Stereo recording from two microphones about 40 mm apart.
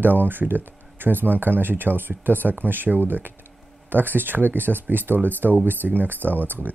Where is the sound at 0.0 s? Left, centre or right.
Right.